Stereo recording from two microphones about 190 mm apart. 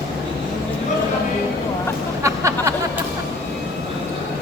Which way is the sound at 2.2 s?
15° right (ahead or behind).